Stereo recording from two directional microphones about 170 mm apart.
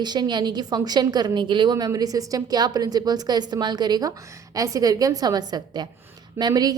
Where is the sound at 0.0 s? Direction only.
25° right (ahead or behind).